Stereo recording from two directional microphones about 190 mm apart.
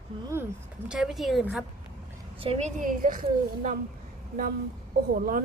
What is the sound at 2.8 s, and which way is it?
Speech, 45° right (ahead or behind).